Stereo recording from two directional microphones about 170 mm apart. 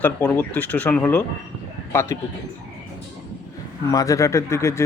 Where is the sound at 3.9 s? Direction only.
20° left (ahead or behind).